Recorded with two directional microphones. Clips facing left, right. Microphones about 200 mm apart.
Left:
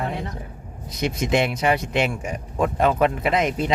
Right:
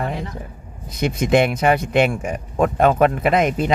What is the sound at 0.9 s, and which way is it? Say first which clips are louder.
A man's voice: right 4 dB; 55° right (ahead or behind).